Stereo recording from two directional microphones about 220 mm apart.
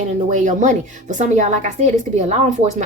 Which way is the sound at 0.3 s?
35° right (ahead or behind).